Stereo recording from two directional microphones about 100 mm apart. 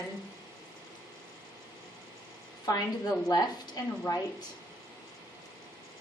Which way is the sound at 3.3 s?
35° left (ahead or behind).